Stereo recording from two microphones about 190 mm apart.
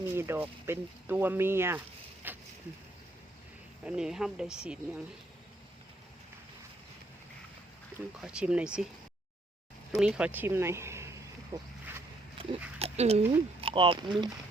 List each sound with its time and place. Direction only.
0.0 s speech: 10° right (ahead or behind)
2.2 s a sound: 10° right (ahead or behind)
3.8 s speech: 5° right (ahead or behind)
8.2 s speech: 5° right (ahead or behind)
9.9 s speech: 5° right (ahead or behind)
12.4 s oink: 25° right (ahead or behind)
12.8 s speech: 35° right (ahead or behind)